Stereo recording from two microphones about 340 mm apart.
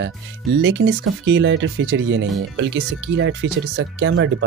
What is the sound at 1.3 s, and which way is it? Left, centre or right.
Speech, right.